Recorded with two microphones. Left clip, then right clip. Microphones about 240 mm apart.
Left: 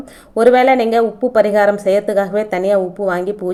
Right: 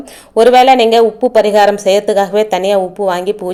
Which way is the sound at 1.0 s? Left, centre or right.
Right.